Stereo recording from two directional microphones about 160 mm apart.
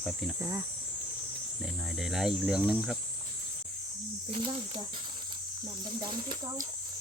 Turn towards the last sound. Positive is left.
turn(degrees=-25)  # may be behind; listen again after turning